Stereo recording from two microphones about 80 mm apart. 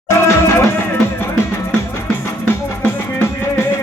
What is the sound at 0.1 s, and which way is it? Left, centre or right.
Music, left.